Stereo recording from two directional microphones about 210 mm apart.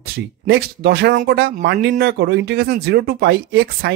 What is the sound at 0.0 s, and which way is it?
Speech, 50° right (ahead or behind).